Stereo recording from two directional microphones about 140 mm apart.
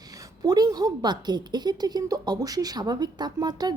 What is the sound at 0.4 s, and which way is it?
A woman's voice, 30° right (ahead or behind).